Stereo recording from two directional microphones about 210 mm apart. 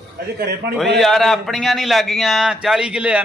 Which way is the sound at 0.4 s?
50° right (ahead or behind).